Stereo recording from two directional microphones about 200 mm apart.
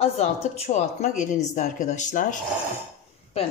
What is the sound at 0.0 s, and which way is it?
Speech, 30° left (ahead or behind).